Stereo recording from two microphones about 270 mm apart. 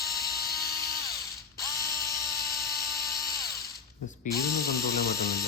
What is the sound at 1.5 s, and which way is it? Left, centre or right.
Electric toothbrush, centre.